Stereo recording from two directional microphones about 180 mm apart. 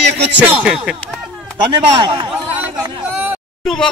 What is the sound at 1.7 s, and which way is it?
Speech, 25° right (ahead or behind).